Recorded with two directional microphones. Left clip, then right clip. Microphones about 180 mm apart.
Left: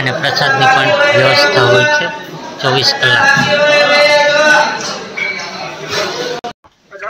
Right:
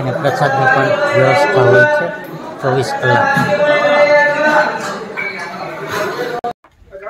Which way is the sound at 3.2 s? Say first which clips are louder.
Left 2 dB; centre (ahead or behind).